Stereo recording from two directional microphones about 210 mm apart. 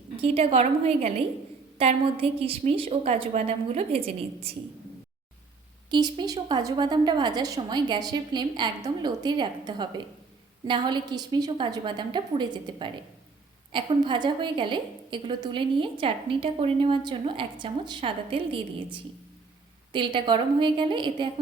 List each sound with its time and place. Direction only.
0.2 s a woman's voice: 25° right (ahead or behind)
5.9 s a woman's voice: 20° right (ahead or behind)